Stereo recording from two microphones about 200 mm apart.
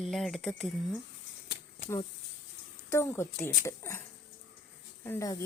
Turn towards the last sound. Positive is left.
turn(degrees=15)  # may be behind; listen again after turning